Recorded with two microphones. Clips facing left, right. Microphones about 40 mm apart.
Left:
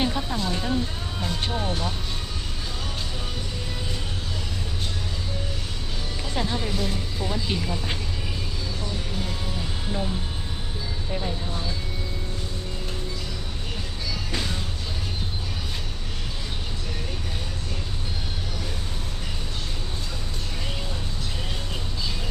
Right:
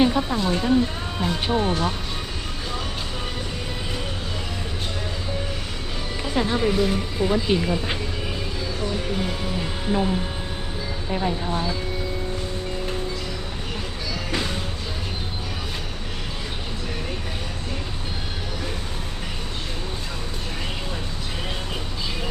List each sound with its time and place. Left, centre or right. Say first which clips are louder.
0.0 s speech: right 6 dB; centre
6.2 s speech: right 7 dB; centre
9.1 s speech: right 5 dB; right